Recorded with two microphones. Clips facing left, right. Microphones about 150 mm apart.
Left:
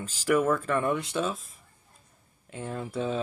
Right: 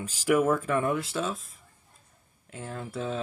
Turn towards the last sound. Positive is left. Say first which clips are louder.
# left 3 dB
turn(degrees=0)  # may be behind; listen again after turning